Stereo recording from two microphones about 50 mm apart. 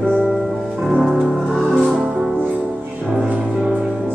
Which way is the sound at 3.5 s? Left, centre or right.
Centre.